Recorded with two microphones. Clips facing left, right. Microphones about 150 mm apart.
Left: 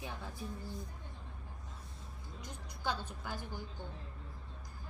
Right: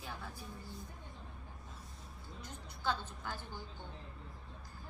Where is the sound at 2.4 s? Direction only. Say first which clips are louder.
Right 1 dB; 15° left (ahead or behind).